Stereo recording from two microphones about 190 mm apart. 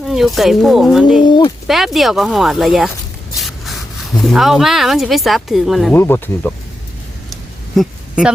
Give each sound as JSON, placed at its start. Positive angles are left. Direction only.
{"t": 0.1, "sound": "speech", "side_deg": 0}
{"t": 1.2, "sound": "speech", "side_deg": 25}
{"t": 1.6, "sound": "speech", "side_deg": 0}
{"t": 3.3, "sound": "rub", "side_deg": 0}
{"t": 4.2, "sound": "speech", "side_deg": 0}
{"t": 5.9, "sound": "speech", "side_deg": 10}
{"t": 7.8, "sound": "a sound", "side_deg": -5}